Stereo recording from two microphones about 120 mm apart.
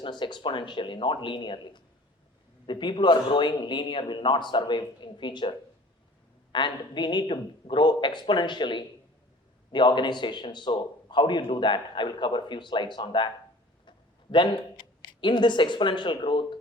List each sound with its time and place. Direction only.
0.0 s a man's voice: 40° left (ahead or behind)